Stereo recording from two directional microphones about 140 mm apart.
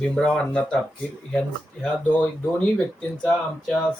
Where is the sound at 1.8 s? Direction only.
10° left (ahead or behind).